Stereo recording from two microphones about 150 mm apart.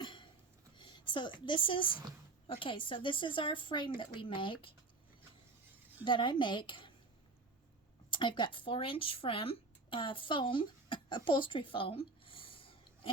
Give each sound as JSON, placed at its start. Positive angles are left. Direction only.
{"t": 0.0, "sound": "a sound", "side_deg": 30}
{"t": 0.8, "sound": "speech", "side_deg": 30}
{"t": 6.1, "sound": "speech", "side_deg": 35}
{"t": 8.1, "sound": "speech", "side_deg": 35}